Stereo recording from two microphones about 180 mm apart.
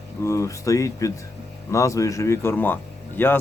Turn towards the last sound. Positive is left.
turn(degrees=10)  # may be behind; listen again after turning